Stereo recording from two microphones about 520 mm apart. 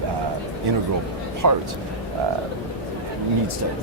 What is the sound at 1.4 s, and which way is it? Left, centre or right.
Speech, right.